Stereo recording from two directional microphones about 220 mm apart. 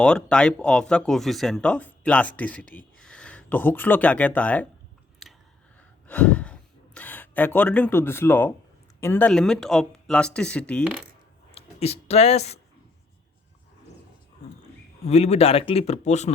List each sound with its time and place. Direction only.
0.0 s speech: 5° left (ahead or behind)
6.1 s speech: 5° left (ahead or behind)
11.5 s speech: 30° left (ahead or behind)
15.0 s speech: 30° left (ahead or behind)